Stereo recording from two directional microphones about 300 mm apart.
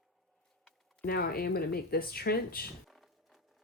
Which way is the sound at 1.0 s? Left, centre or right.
Left.